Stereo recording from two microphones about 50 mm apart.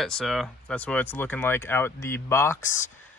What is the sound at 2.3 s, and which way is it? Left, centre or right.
Speech, left.